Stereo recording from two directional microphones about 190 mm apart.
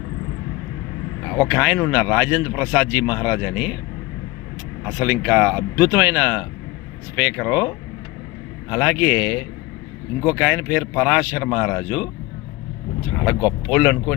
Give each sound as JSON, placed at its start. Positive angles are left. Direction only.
{"t": 1.4, "sound": "speech", "side_deg": -5}
{"t": 4.9, "sound": "speech", "side_deg": -15}
{"t": 8.7, "sound": "speech", "side_deg": -10}